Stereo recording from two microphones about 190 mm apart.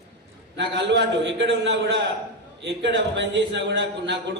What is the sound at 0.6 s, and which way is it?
A man's voice, 65° right (ahead or behind).